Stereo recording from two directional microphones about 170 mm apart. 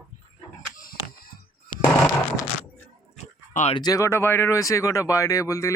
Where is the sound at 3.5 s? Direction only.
45° left (ahead or behind).